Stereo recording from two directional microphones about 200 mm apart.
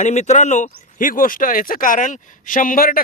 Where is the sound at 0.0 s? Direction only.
35° left (ahead or behind).